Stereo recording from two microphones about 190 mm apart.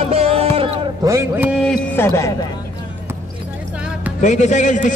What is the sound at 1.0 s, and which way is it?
Speech, 15° right (ahead or behind).